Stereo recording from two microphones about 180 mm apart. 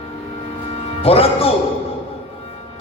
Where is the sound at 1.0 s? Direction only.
35° left (ahead or behind).